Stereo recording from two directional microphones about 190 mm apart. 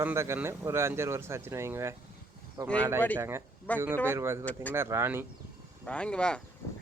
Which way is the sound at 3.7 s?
10° left (ahead or behind).